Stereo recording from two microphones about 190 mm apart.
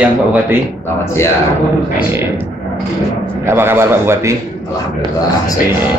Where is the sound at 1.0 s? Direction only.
15° left (ahead or behind).